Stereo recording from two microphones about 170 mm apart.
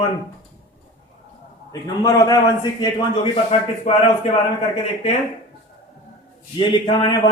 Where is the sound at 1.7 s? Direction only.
20° left (ahead or behind).